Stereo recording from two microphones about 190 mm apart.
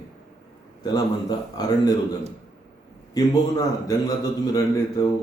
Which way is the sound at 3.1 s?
20° left (ahead or behind).